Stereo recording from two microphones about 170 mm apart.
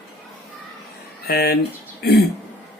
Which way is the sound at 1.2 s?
65° left (ahead or behind).